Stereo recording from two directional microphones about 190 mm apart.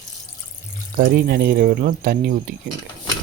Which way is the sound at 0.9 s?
55° right (ahead or behind).